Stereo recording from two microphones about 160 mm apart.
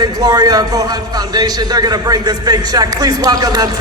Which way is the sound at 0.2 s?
25° right (ahead or behind).